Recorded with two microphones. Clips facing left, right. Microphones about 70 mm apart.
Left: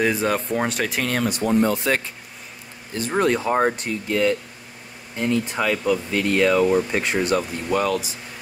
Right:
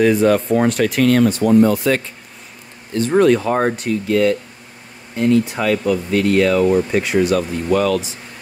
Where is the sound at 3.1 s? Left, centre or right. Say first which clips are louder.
Right 5 dB; centre.